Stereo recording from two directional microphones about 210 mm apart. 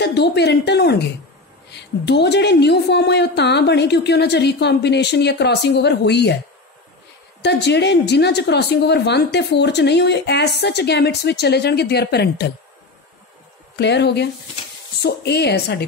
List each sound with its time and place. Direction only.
0.0 s a woman's voice: 55° left (ahead or behind)
7.4 s a woman's voice: 55° left (ahead or behind)
13.7 s a woman's voice: 55° left (ahead or behind)